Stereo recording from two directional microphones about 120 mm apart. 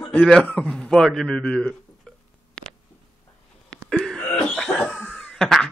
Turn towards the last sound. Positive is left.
turn(degrees=5)  # may be behind; listen again after turning